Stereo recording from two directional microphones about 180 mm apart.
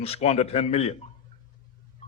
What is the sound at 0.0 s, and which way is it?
Speech, 35° left (ahead or behind).